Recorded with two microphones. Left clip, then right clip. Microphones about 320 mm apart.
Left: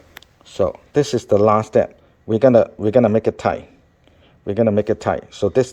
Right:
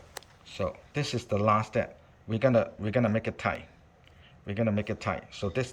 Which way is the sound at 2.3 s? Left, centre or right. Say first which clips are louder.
Left 13 dB; left.